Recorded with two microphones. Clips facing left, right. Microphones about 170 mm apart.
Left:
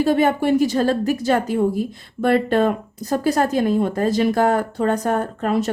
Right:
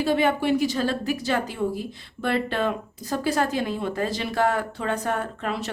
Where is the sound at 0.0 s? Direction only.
45° left (ahead or behind).